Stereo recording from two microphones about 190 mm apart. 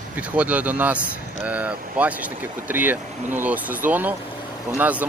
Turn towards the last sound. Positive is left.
turn(degrees=-10)  # may be behind; listen again after turning